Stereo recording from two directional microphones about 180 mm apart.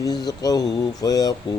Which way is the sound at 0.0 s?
20° left (ahead or behind).